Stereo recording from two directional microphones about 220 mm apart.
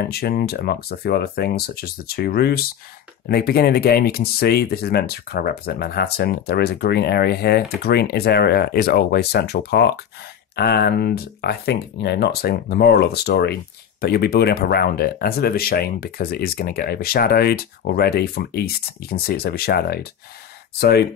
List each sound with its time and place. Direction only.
0.1 s speech: 45° left (ahead or behind)